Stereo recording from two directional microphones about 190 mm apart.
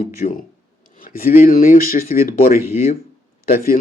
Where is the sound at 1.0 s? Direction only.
50° left (ahead or behind).